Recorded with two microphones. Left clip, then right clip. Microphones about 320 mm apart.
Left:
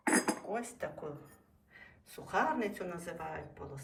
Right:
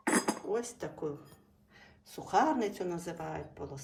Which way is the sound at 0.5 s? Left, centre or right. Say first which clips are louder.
Right 3 dB; centre.